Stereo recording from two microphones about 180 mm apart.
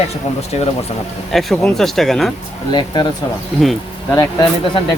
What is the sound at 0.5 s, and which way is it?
Speech, 35° left (ahead or behind).